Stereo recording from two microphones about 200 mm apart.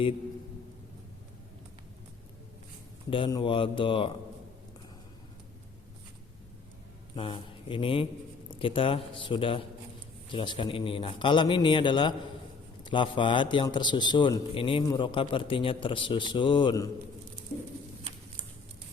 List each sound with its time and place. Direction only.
3.1 s speech: 25° left (ahead or behind)
7.2 s speech: 25° left (ahead or behind)